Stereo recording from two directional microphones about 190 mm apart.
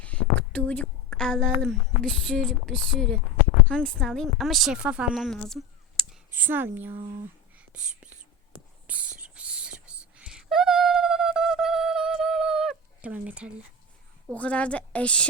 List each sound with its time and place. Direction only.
0.0 s a woman's voice: 5° left (ahead or behind)
6.0 s a sound: 5° left (ahead or behind)
6.3 s speech: 10° right (ahead or behind)
6.9 s speech: 30° right (ahead or behind)
7.5 s whispering: 5° right (ahead or behind)
14.3 s a woman's voice: 5° left (ahead or behind)